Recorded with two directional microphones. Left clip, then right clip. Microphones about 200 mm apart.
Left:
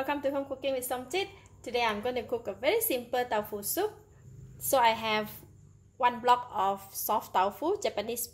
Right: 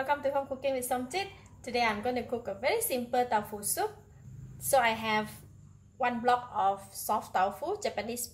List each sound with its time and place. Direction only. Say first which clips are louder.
0.0 s a woman's voice: right 1 dB; 35° left (ahead or behind)